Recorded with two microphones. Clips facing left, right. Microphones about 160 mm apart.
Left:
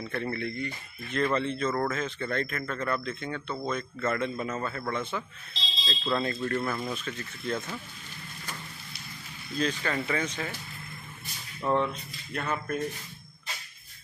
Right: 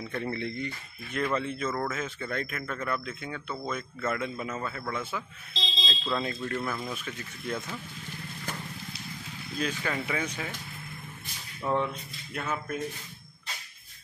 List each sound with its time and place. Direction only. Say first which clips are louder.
0.1 s speech: even; 15° right (ahead or behind)
1.1 s a man's voice: left 2 dB; 5° right (ahead or behind)
9.6 s speech: left 2 dB; 10° right (ahead or behind)
11.6 s speech: left 2 dB; 10° right (ahead or behind)